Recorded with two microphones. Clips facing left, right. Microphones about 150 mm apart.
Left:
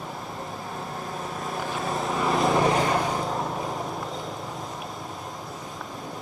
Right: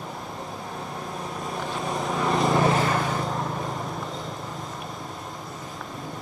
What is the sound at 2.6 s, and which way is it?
Vehicle, 20° left (ahead or behind).